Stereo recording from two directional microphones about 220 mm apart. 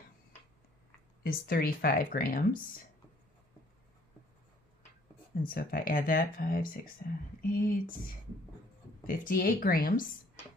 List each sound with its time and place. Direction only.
1.2 s speech: 45° left (ahead or behind)
5.4 s speech: 40° left (ahead or behind)
9.0 s speech: 40° left (ahead or behind)